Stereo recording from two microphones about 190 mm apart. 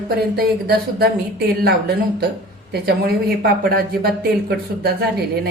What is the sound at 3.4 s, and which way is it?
Speech, 55° right (ahead or behind).